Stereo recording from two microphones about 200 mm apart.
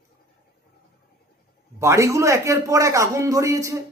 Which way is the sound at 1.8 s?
15° right (ahead or behind).